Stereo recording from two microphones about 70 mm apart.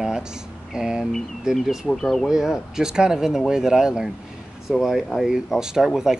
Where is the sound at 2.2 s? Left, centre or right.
Centre.